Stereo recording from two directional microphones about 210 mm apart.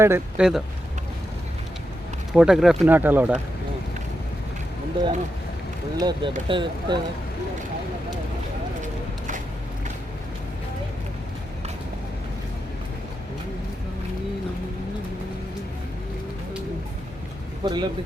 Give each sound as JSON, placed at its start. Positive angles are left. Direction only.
{"t": 0.0, "sound": "speech", "side_deg": -10}
{"t": 2.3, "sound": "speech", "side_deg": -5}
{"t": 6.0, "sound": "speech", "side_deg": -20}
{"t": 8.8, "sound": "a sound", "side_deg": -35}
{"t": 17.6, "sound": "speech", "side_deg": -20}